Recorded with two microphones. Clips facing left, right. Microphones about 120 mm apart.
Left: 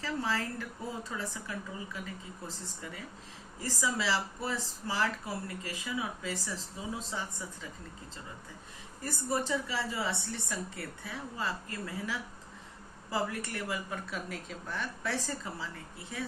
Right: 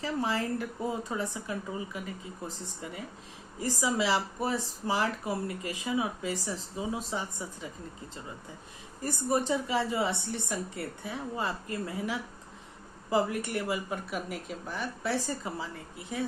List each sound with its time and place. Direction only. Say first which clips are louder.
0.0 s speech: right 3 dB; 20° right (ahead or behind)
9.0 s speech: right 4 dB; 20° right (ahead or behind)